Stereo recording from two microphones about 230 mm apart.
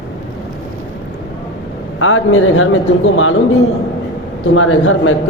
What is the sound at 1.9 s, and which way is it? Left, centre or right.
Speech, left.